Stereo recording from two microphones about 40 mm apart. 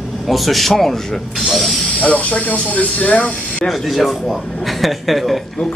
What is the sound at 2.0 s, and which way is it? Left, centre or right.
Speech, left.